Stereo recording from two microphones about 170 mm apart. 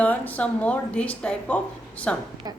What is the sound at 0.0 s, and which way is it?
Speech, 10° left (ahead or behind).